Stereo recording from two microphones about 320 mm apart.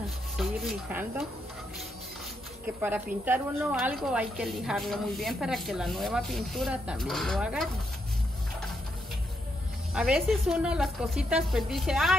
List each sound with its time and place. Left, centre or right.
0.4 s a woman's voice: centre
2.8 s a woman's voice: centre
9.9 s a woman's voice: centre